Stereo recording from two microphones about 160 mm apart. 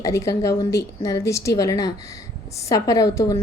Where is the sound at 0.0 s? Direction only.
20° left (ahead or behind).